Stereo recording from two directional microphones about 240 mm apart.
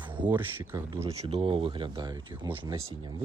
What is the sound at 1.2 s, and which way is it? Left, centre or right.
Speech, right.